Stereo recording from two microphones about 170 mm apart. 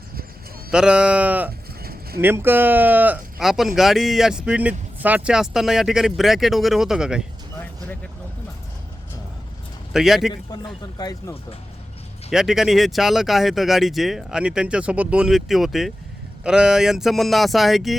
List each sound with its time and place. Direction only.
0.7 s speech: 5° right (ahead or behind)
1.8 s a sound: 65° right (ahead or behind)
2.2 s speech: 10° right (ahead or behind)
9.9 s speech: centre (ahead or behind)
10.9 s speech: 20° left (ahead or behind)
12.3 s speech: centre (ahead or behind)